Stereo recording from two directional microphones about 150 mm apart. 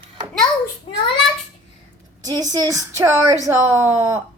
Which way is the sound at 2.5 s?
20° right (ahead or behind).